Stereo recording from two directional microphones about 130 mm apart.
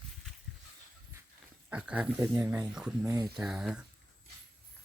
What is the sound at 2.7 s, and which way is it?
Speech, 5° right (ahead or behind).